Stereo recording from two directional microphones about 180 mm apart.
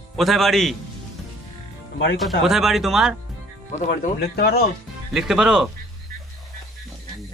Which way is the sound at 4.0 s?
60° left (ahead or behind).